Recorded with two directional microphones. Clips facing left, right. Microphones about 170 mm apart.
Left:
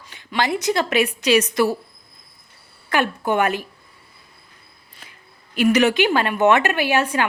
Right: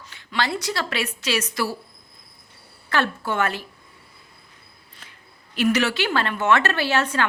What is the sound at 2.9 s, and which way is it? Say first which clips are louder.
Speech: left 4 dB; 15° left (ahead or behind).